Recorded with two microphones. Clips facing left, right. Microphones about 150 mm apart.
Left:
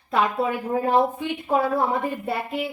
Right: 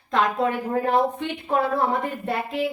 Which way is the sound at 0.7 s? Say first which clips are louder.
Left 3 dB; 10° left (ahead or behind).